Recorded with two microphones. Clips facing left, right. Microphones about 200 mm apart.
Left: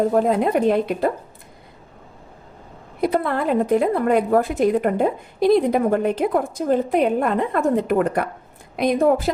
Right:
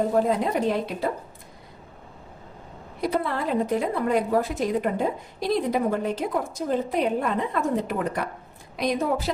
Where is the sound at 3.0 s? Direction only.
55° left (ahead or behind).